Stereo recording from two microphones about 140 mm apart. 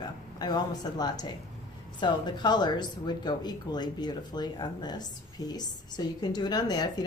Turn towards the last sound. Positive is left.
turn(degrees=30)  # may be behind; listen again after turning